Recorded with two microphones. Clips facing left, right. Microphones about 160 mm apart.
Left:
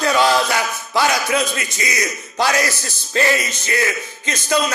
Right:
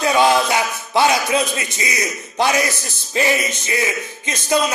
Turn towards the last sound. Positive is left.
turn(degrees=-20)  # may be behind; listen again after turning